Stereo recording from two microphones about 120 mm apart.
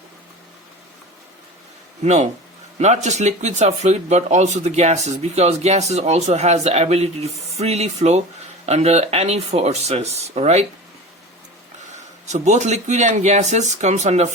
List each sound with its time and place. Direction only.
2.7 s speech: 75° right (ahead or behind)
12.2 s speech: 80° right